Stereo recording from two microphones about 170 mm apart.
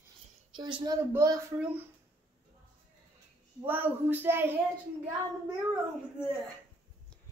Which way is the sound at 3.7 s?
10° right (ahead or behind).